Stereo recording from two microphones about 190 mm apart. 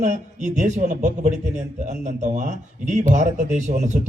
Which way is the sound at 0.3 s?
40° right (ahead or behind).